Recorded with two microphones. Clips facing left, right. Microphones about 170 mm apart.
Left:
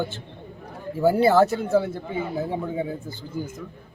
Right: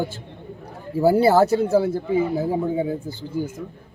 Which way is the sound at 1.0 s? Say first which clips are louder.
Right 2 dB; 35° right (ahead or behind).